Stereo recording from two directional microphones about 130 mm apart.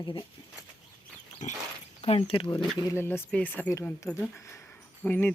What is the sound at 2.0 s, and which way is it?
Speech, 50° left (ahead or behind).